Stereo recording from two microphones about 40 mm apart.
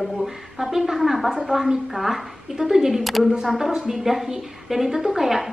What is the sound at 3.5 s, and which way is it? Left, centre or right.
A woman's voice, centre.